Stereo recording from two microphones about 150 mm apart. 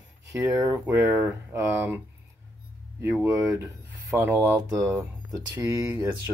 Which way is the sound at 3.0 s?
15° right (ahead or behind).